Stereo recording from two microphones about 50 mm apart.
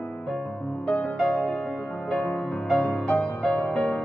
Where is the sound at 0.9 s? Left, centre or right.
Left.